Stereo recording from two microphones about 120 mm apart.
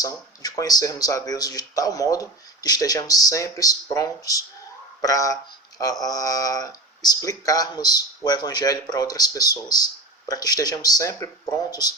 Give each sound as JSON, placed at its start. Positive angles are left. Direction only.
{"t": 0.4, "sound": "speech", "side_deg": 30}